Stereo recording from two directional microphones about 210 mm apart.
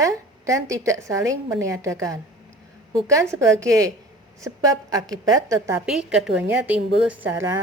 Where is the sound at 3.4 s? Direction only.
15° right (ahead or behind).